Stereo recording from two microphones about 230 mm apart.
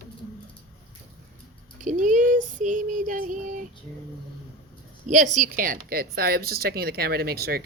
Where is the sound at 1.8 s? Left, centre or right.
Right.